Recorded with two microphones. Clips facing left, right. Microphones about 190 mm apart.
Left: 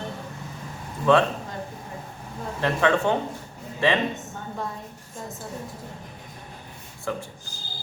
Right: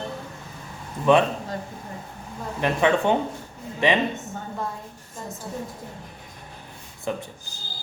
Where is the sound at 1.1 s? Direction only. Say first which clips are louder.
Right 1 dB; 15° right (ahead or behind).